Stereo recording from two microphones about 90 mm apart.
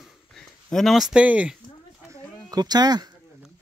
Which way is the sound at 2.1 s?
45° right (ahead or behind).